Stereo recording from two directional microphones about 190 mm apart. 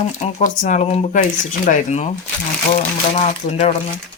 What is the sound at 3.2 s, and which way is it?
Speech, 30° left (ahead or behind).